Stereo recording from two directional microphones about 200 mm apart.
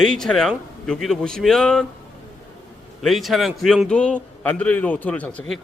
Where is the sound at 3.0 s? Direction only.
Centre (ahead or behind).